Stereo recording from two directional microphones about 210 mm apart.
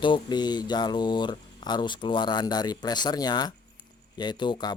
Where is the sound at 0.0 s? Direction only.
20° left (ahead or behind).